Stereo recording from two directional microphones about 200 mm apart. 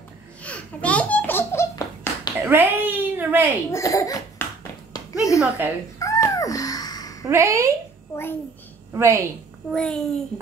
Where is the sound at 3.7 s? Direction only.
15° left (ahead or behind).